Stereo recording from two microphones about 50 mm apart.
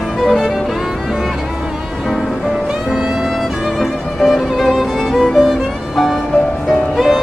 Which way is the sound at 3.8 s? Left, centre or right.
Centre.